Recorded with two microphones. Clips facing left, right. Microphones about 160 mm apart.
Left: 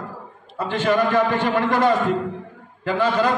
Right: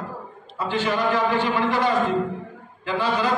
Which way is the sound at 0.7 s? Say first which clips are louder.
Left 3 dB; 50° left (ahead or behind).